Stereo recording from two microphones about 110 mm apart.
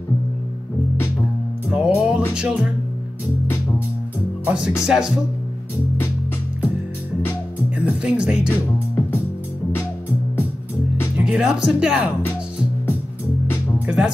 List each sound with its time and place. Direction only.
1.7 s music: 5° right (ahead or behind)
2.3 s speech: 10° right (ahead or behind)
4.5 s speech: 5° right (ahead or behind)
7.7 s speech: 10° right (ahead or behind)
8.5 s music: 20° left (ahead or behind)
11.1 s speech: 5° right (ahead or behind)
13.8 s speech: 10° right (ahead or behind)